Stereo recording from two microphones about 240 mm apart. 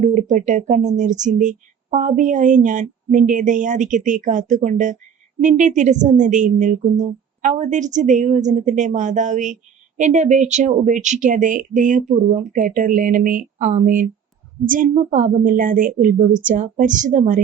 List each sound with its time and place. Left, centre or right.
0.0 s speech: right